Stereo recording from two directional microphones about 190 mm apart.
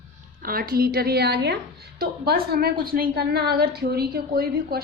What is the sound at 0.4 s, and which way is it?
A woman's voice, 50° right (ahead or behind).